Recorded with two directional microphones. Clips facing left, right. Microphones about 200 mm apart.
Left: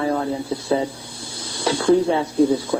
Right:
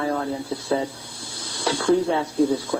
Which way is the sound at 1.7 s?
20° left (ahead or behind).